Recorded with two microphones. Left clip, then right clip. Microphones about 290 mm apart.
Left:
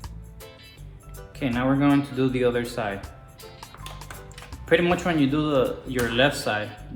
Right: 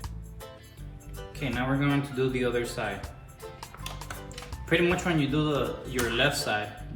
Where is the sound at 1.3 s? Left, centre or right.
Left.